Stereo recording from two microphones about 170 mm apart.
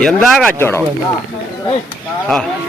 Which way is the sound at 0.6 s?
15° left (ahead or behind).